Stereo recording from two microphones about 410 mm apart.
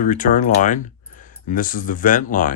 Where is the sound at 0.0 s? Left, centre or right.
Centre.